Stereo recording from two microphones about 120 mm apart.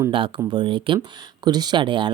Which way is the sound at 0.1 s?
45° right (ahead or behind).